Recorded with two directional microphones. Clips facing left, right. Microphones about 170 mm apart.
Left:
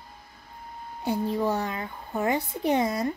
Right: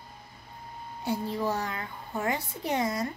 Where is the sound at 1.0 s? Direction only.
15° left (ahead or behind).